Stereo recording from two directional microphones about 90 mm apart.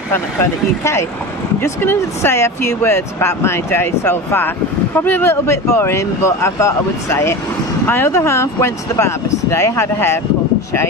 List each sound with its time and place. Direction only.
0.1 s speech: 30° left (ahead or behind)